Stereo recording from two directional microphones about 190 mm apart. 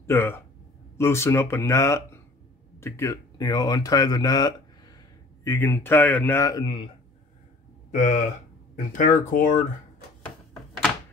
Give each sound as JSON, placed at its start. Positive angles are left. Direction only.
{"t": 0.0, "sound": "a man's voice", "side_deg": 15}
{"t": 7.9, "sound": "speech", "side_deg": 40}